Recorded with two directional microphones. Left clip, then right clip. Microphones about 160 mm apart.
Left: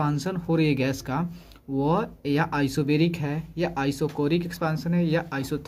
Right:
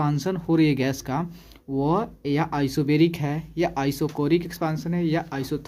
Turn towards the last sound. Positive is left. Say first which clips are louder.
# even
turn(degrees=-20)  # may be behind; listen again after turning